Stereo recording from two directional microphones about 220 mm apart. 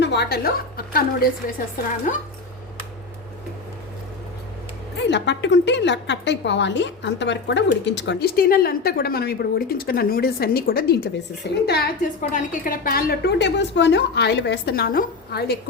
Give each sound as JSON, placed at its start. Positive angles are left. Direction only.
{"t": 0.0, "sound": "a woman's voice", "side_deg": 50}
{"t": 5.0, "sound": "a woman's voice", "side_deg": 55}
{"t": 12.3, "sound": "a woman's voice", "side_deg": 35}